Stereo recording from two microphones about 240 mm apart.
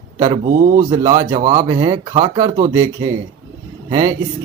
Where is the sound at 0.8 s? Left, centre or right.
Centre.